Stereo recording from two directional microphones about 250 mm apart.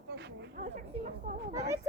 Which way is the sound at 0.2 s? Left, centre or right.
Right.